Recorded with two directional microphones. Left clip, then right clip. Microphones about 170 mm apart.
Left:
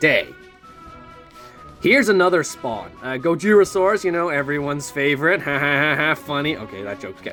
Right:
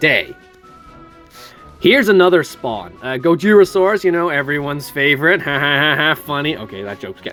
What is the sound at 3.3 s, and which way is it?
Speech, 25° right (ahead or behind).